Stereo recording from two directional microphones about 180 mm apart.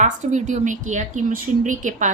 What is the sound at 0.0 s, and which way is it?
Speech, 40° right (ahead or behind).